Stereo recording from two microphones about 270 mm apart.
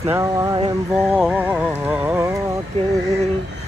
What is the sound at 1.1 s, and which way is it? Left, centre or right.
Music, centre.